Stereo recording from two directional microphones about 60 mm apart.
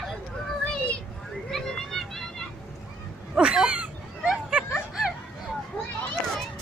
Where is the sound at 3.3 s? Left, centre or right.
Centre.